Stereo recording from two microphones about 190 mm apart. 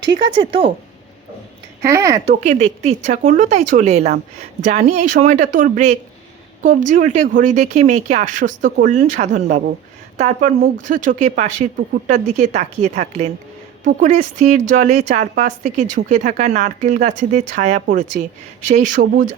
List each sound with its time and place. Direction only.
0.3 s speech: 30° right (ahead or behind)
1.8 s speech: 15° right (ahead or behind)
2.2 s speech: 35° right (ahead or behind)